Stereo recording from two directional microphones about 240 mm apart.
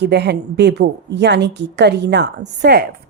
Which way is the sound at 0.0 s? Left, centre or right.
Right.